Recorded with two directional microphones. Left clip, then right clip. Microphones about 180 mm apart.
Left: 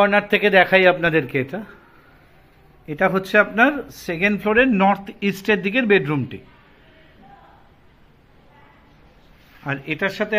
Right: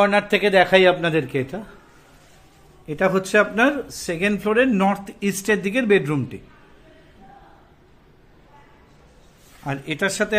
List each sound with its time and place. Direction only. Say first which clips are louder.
0.0 s speech: left 1 dB; 5° right (ahead or behind)
2.9 s speech: left 1 dB; centre (ahead or behind)
9.6 s speech: left 1 dB; 15° right (ahead or behind)